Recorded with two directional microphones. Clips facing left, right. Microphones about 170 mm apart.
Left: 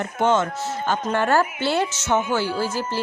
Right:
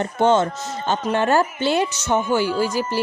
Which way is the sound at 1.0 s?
20° right (ahead or behind).